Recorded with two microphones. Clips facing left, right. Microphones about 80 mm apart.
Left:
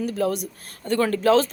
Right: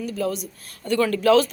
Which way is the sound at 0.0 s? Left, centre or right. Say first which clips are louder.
Left 2 dB; left.